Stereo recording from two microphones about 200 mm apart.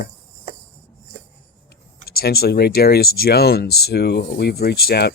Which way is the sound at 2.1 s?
50° left (ahead or behind).